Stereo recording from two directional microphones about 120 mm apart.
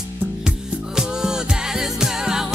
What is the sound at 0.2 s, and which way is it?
Music, 10° right (ahead or behind).